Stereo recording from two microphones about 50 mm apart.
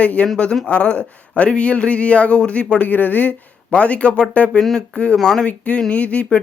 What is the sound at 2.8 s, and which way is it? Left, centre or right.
Speech, left.